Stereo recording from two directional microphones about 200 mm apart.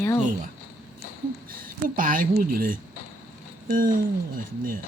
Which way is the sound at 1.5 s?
45° right (ahead or behind).